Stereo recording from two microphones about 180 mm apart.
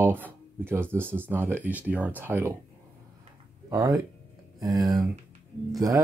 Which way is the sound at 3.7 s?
20° right (ahead or behind).